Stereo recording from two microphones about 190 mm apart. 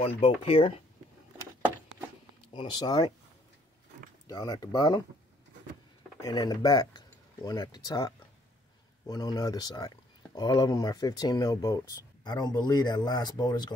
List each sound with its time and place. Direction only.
0.0 s speech: 30° left (ahead or behind)
2.5 s speech: 25° left (ahead or behind)
4.3 s speech: 20° left (ahead or behind)
6.2 s speech: 20° left (ahead or behind)